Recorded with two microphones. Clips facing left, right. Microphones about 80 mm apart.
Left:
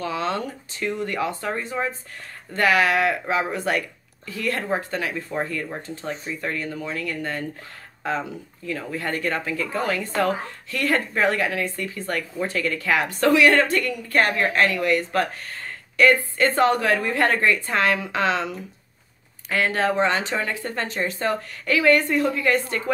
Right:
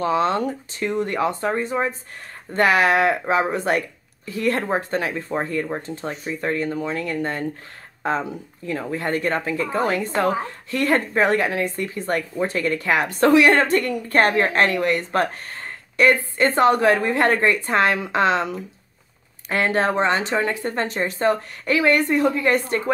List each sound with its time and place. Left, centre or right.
0.0 s speech: right